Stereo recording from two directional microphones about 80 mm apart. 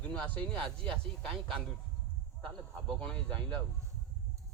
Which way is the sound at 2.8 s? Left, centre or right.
Centre.